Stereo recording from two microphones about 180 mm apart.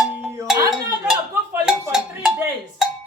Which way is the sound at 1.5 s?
10° right (ahead or behind).